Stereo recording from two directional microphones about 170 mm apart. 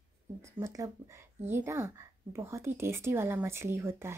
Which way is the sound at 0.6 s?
20° right (ahead or behind).